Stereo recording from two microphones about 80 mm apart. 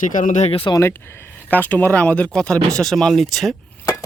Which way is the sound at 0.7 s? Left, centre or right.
Left.